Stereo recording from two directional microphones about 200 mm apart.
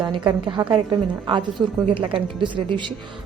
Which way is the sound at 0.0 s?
25° right (ahead or behind).